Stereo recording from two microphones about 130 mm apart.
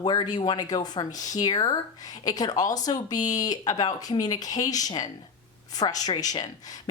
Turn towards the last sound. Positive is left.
turn(degrees=30)  # may be behind; listen again after turning